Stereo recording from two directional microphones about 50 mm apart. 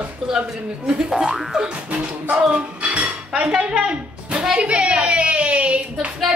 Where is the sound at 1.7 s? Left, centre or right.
Right.